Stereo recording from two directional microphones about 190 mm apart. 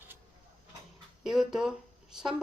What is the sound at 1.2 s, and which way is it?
Speech, centre (ahead or behind).